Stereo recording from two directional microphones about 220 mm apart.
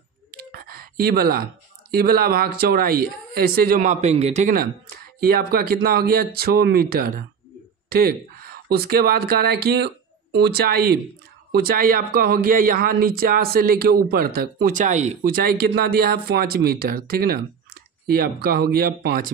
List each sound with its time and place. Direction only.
0.3 s computer keyboard: 45° right (ahead or behind)
2.0 s speech: 45° right (ahead or behind)